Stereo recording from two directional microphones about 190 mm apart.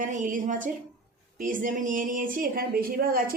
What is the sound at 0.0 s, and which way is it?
Speech, 40° right (ahead or behind).